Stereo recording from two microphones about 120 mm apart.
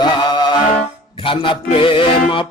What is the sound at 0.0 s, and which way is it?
Music, 40° left (ahead or behind).